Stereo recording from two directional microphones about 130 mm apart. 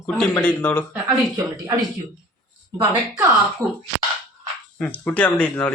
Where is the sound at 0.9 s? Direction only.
20° right (ahead or behind).